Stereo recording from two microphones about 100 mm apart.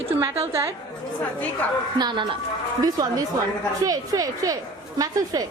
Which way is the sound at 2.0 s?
50° right (ahead or behind).